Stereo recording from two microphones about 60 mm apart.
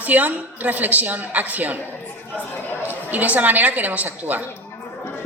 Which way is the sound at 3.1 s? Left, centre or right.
Right.